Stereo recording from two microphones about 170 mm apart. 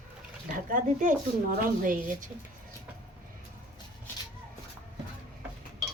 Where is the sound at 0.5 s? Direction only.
50° right (ahead or behind).